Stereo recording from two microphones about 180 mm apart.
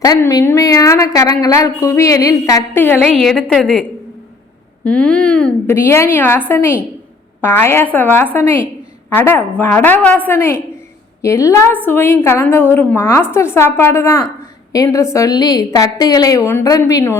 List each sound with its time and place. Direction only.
0.0 s a woman's voice: 20° left (ahead or behind)
3.0 s a woman's voice: centre (ahead or behind)